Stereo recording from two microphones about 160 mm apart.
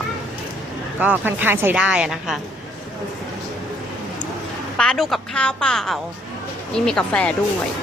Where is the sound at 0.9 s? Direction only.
10° right (ahead or behind).